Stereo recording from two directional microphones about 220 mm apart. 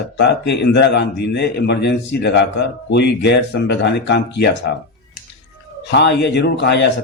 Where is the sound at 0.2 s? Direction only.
50° left (ahead or behind).